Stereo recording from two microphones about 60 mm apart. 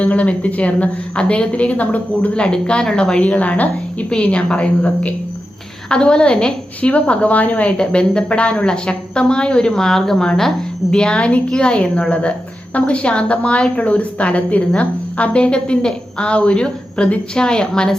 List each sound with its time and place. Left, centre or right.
0.0 s a woman's voice: left